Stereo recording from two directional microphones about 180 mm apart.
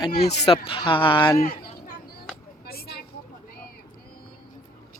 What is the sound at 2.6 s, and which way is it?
Vehicle, 60° left (ahead or behind).